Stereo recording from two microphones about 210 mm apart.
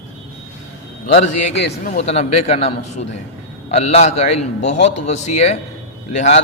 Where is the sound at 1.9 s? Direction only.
30° left (ahead or behind).